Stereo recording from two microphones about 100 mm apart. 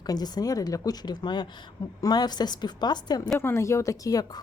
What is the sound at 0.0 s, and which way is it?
A woman's voice, 40° left (ahead or behind).